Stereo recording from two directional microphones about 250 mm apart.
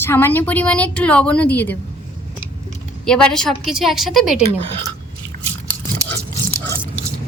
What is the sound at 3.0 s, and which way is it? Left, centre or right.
Speech, centre.